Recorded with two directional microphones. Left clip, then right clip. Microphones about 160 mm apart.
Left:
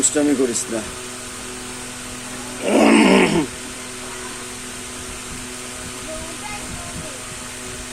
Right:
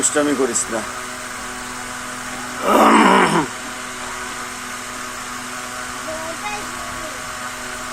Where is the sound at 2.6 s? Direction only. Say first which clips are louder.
Right 2 dB; 50° right (ahead or behind).